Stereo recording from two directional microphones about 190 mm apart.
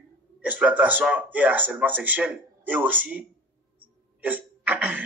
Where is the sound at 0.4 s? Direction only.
5° right (ahead or behind).